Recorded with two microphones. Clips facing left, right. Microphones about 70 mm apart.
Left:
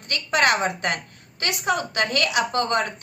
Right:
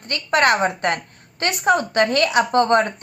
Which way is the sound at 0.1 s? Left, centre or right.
Right.